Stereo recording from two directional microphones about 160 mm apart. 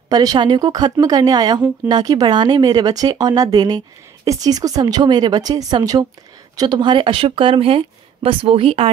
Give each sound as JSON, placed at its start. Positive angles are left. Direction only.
{"t": 0.1, "sound": "speech", "side_deg": -25}